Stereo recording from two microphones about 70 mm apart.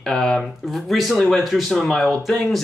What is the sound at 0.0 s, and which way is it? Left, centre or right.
Speech, centre.